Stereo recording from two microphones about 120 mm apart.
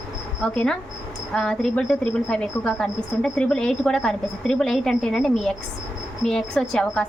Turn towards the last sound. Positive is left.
turn(degrees=5)  # may be behind; listen again after turning